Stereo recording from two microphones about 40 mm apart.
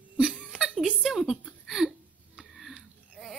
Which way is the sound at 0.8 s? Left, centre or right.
Centre.